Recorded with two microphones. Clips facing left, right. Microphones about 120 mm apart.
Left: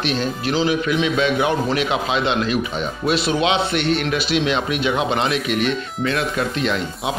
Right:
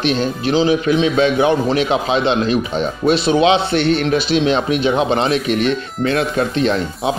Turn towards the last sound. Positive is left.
turn(degrees=-35)  # may be behind; listen again after turning